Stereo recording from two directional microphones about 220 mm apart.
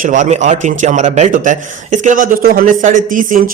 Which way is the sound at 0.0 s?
35° right (ahead or behind).